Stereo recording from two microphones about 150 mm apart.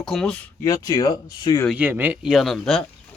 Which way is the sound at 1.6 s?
10° right (ahead or behind).